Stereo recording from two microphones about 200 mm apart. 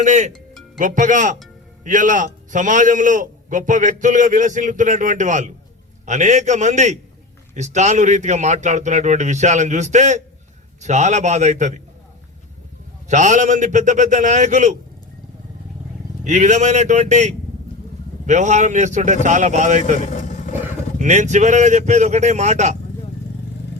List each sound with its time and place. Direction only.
0.0 s a man's voice: 35° right (ahead or behind)
13.1 s a man's voice: 35° right (ahead or behind)
16.2 s a man's voice: 40° right (ahead or behind)
20.0 s vehicle: 40° left (ahead or behind)
21.0 s a man's voice: 35° right (ahead or behind)